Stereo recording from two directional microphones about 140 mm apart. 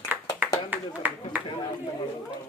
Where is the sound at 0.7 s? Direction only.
10° right (ahead or behind).